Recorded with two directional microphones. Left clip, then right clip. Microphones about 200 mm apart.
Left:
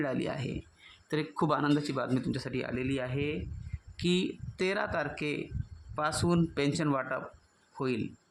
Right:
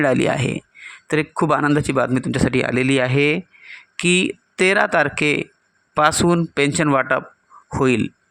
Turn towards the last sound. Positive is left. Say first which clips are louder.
# right 16 dB
turn(degrees=-35)  # may be behind; listen again after turning